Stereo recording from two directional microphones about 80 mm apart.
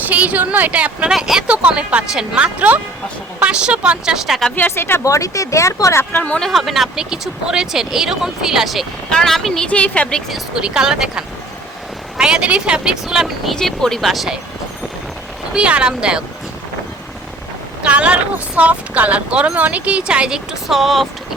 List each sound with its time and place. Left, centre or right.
0.0 s a woman's voice: centre
1.1 s speech: centre
4.5 s speech: left
5.0 s speech: left
6.1 s speech: centre
6.4 s speech: centre
9.6 s speech: centre
10.3 s speech: centre
15.5 s speech: centre
17.8 s speech: centre